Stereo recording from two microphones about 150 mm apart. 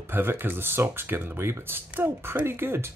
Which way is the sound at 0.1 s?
15° right (ahead or behind).